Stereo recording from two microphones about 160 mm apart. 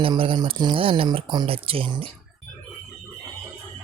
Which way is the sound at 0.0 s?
35° right (ahead or behind).